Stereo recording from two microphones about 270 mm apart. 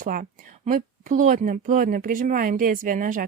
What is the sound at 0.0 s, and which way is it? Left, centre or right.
Speech, right.